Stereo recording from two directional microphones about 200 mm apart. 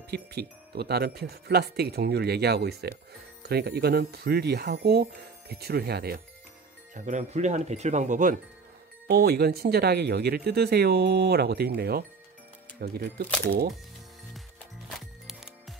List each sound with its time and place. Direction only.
0.1 s speech: 55° right (ahead or behind)
6.9 s speech: 35° right (ahead or behind)
9.0 s speech: 50° right (ahead or behind)
14.9 s music: centre (ahead or behind)